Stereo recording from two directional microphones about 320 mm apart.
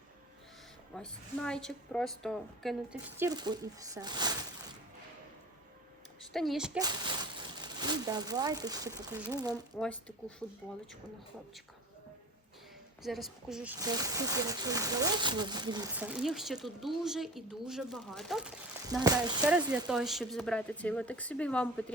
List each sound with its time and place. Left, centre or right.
0.9 s a woman's voice: centre
6.3 s speech: centre
13.0 s speech: centre